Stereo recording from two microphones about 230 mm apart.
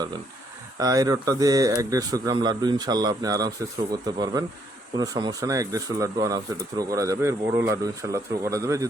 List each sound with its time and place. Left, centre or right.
0.8 s speech: centre